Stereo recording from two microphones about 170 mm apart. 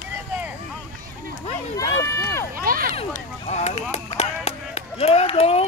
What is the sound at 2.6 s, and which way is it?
Speech, 60° right (ahead or behind).